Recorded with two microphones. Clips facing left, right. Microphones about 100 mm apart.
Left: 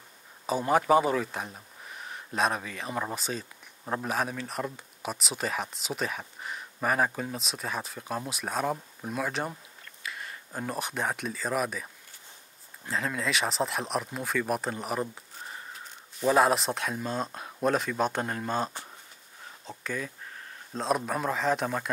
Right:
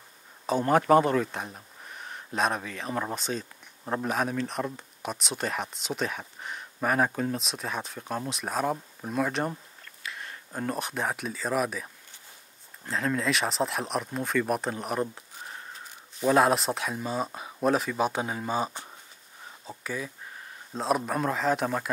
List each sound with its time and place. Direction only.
0.5 s speech: 5° left (ahead or behind)